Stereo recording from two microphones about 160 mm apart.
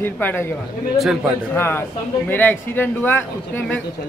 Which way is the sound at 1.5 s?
15° left (ahead or behind).